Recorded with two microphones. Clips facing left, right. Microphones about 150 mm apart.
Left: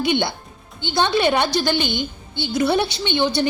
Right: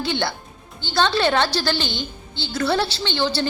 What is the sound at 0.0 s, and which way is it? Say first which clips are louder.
A woman's voice: left 4 dB; 20° left (ahead or behind).